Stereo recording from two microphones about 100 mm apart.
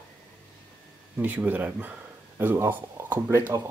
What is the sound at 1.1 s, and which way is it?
Speech, 15° right (ahead or behind).